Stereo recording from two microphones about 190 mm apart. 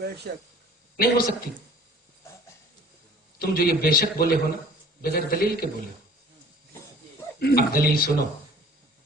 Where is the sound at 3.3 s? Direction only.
50° left (ahead or behind).